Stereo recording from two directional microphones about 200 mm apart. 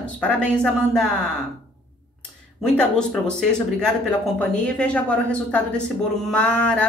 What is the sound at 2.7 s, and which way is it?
Speech, 5° left (ahead or behind).